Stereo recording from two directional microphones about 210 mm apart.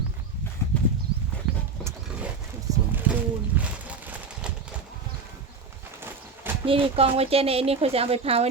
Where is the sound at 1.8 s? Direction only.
Centre (ahead or behind).